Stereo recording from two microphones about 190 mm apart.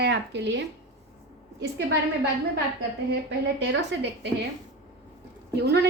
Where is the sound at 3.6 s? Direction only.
65° right (ahead or behind).